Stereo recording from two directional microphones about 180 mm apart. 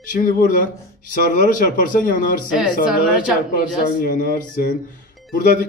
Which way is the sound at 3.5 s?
50° left (ahead or behind).